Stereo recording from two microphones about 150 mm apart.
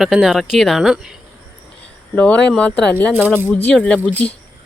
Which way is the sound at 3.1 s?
15° right (ahead or behind).